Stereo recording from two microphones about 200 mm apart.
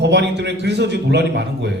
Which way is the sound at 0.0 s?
60° right (ahead or behind).